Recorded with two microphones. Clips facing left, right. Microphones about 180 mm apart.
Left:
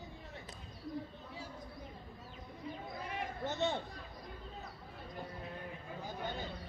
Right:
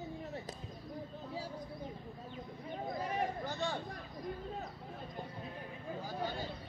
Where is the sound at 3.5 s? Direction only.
20° left (ahead or behind).